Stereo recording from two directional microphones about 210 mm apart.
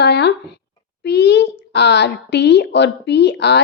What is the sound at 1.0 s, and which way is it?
A woman's voice, 50° left (ahead or behind).